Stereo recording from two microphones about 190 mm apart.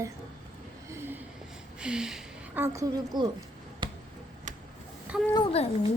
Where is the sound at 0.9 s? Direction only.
10° right (ahead or behind).